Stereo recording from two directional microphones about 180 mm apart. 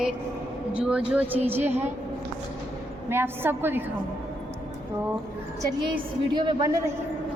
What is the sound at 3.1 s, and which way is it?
Speech, 10° right (ahead or behind).